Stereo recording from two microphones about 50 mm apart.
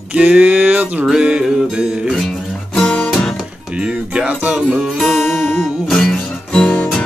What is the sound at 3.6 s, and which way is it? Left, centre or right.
Music, right.